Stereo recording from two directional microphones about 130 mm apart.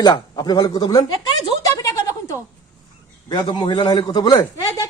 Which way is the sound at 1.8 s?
25° left (ahead or behind).